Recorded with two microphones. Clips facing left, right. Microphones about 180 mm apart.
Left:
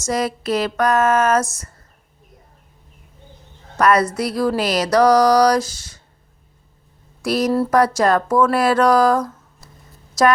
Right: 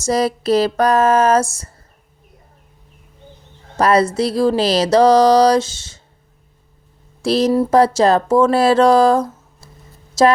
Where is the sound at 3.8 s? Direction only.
30° right (ahead or behind).